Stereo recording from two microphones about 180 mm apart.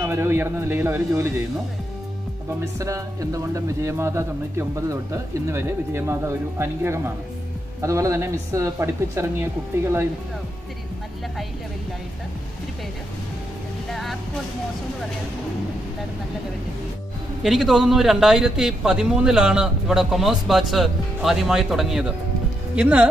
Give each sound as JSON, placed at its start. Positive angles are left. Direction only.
{"t": 0.0, "sound": "speech", "side_deg": -15}
{"t": 2.8, "sound": "speech", "side_deg": -20}
{"t": 13.8, "sound": "speech", "side_deg": 0}
{"t": 17.4, "sound": "a man's voice", "side_deg": 0}